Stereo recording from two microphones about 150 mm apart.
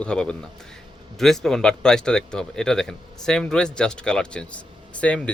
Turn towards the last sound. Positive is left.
turn(degrees=10)  # may be behind; listen again after turning